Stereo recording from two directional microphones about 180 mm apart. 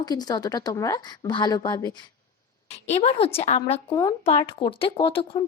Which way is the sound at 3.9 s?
20° left (ahead or behind).